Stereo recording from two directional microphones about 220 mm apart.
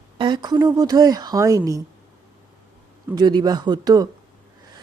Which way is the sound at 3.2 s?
20° right (ahead or behind).